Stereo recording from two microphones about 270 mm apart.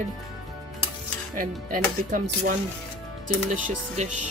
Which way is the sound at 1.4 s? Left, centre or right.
Right.